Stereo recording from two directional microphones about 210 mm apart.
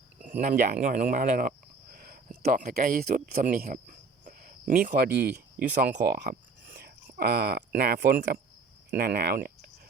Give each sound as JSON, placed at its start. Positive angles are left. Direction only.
{"t": 0.3, "sound": "speech", "side_deg": -40}